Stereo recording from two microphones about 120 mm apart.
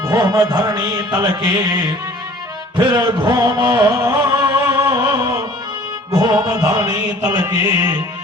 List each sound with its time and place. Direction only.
0.1 s music: 35° right (ahead or behind)
5.1 s music: 25° right (ahead or behind)